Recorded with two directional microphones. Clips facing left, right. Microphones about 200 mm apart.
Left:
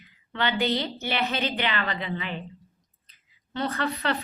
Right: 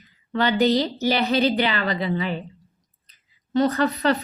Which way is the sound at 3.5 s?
40° right (ahead or behind).